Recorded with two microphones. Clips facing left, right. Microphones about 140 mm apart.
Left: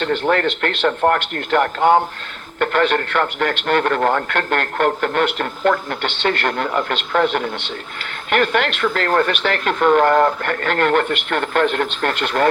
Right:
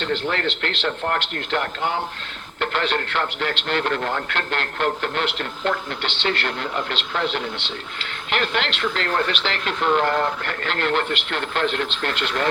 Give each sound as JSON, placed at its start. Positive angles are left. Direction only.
{"t": 0.0, "sound": "speech", "side_deg": 50}